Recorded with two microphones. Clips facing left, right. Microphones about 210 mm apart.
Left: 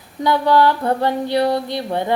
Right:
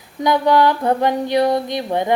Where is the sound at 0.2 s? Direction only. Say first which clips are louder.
Even; 15° right (ahead or behind).